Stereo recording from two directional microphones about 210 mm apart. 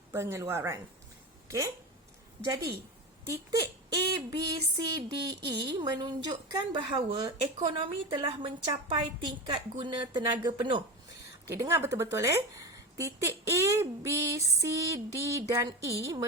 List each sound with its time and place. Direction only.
0.1 s a woman's voice: 15° right (ahead or behind)
3.2 s a woman's voice: 15° right (ahead or behind)